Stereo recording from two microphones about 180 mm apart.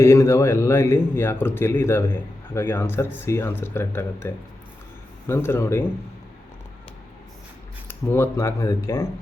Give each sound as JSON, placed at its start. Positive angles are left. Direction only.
{"t": 0.0, "sound": "a man's voice", "side_deg": 15}
{"t": 7.9, "sound": "a man's voice", "side_deg": 15}